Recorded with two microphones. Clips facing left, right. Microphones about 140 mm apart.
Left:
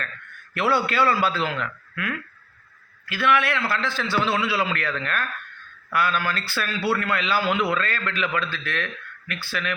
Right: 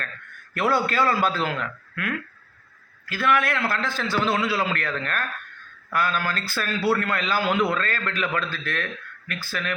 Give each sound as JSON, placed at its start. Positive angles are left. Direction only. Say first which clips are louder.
{"t": 0.5, "sound": "a man's voice", "louder": "even", "side_deg": -45}